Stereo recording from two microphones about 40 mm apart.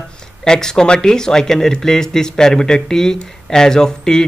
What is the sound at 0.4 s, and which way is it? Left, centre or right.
A man's voice, centre.